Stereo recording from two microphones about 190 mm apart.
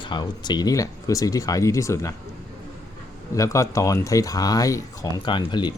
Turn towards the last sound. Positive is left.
turn(degrees=25)  # may be behind; listen again after turning